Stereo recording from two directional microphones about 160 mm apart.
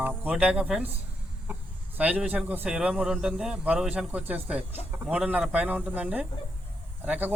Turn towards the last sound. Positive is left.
turn(degrees=-10)  # may be behind; listen again after turning